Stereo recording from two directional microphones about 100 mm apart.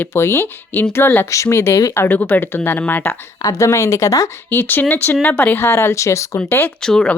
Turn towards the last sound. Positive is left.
turn(degrees=5)  # may be behind; listen again after turning